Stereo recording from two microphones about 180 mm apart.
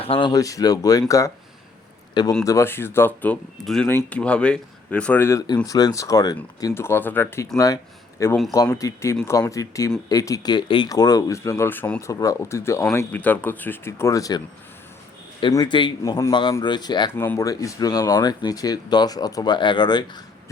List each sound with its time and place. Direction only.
0.0 s speech: 30° left (ahead or behind)
2.4 s speech: 15° left (ahead or behind)